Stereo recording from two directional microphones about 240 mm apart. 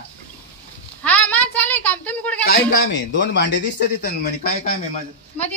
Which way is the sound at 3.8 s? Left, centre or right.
Left.